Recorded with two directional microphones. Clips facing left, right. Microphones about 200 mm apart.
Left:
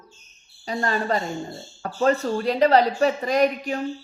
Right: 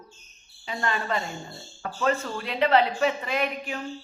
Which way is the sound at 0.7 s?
40° left (ahead or behind).